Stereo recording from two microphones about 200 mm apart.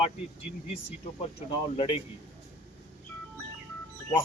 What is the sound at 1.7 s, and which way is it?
Speech, 25° left (ahead or behind).